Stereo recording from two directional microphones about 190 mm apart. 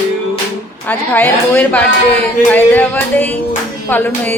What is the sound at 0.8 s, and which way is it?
A woman's voice, 10° left (ahead or behind).